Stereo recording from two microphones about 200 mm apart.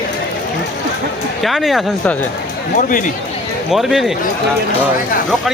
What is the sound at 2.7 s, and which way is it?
Speech, 40° left (ahead or behind).